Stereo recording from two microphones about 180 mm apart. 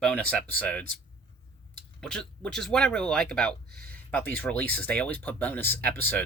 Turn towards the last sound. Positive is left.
turn(degrees=10)  # may be behind; listen again after turning